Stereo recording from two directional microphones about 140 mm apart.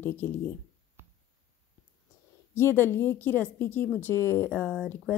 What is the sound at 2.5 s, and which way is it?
Speech, 15° left (ahead or behind).